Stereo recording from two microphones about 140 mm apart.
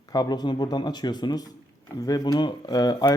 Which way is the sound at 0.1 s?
30° left (ahead or behind).